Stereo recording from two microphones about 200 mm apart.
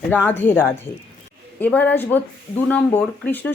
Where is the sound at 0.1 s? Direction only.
10° left (ahead or behind).